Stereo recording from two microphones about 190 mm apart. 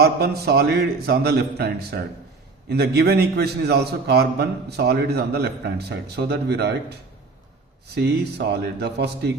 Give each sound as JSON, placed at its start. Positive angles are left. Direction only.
{"t": 0.0, "sound": "a man's voice", "side_deg": -55}
{"t": 7.9, "sound": "a man's voice", "side_deg": -60}